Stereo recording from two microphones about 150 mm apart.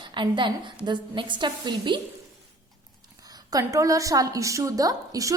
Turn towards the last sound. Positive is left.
turn(degrees=-25)  # may be behind; listen again after turning